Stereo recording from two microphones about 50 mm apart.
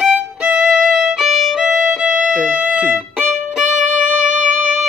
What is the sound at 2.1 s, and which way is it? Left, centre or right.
Music, right.